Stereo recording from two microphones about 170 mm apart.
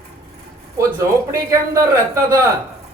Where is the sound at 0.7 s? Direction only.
20° right (ahead or behind).